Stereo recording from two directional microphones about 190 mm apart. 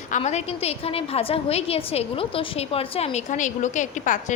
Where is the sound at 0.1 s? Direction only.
35° left (ahead or behind).